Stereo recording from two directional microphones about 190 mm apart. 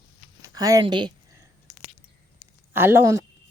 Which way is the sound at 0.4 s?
20° right (ahead or behind).